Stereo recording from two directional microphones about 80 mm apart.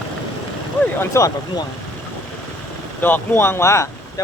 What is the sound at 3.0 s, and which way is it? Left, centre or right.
Speech, left.